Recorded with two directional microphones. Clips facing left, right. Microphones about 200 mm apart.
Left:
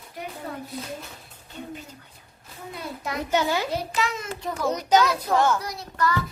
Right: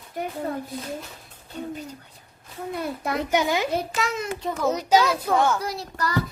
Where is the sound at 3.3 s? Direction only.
15° right (ahead or behind).